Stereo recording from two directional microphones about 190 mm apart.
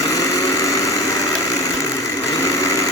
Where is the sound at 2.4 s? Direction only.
15° left (ahead or behind).